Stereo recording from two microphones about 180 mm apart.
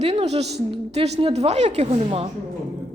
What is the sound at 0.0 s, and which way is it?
A woman's voice, 35° right (ahead or behind).